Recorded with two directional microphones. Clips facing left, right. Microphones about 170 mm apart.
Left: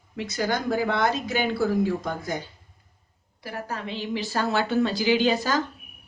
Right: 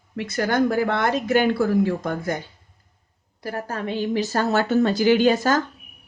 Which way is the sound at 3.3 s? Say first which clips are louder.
Right 4 dB; 45° right (ahead or behind).